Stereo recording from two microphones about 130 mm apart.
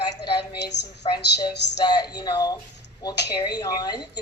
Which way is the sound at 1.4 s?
35° left (ahead or behind).